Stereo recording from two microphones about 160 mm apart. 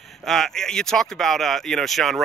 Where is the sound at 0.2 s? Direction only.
5° left (ahead or behind).